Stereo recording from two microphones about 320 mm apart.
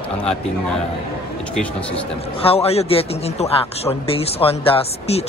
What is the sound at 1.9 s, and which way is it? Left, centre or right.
A man's voice, centre.